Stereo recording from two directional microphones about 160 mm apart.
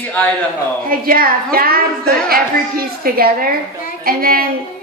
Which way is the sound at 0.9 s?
65° right (ahead or behind).